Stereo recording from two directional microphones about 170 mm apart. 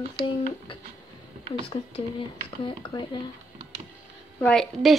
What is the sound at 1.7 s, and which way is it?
Speech, 30° left (ahead or behind).